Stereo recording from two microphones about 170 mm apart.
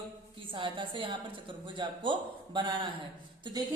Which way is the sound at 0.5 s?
30° right (ahead or behind).